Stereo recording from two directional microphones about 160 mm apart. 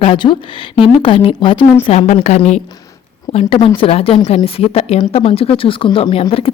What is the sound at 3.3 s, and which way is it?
Speech, 35° left (ahead or behind).